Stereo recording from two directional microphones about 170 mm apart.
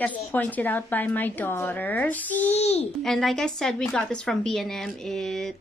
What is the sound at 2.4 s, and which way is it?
Speech, 40° left (ahead or behind).